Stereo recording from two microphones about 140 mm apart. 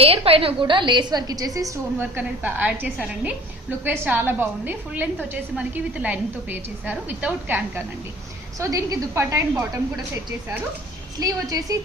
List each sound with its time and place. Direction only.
0.0 s a woman's voice: 45° right (ahead or behind); by 1.7 s 25° right (ahead or behind)
2.0 s a woman's voice: 10° right (ahead or behind)
8.5 s a woman's voice: 25° right (ahead or behind)
11.2 s a woman's voice: 25° right (ahead or behind)